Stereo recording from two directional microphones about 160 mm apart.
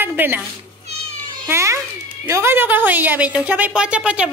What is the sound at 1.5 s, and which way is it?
Speech, 20° right (ahead or behind).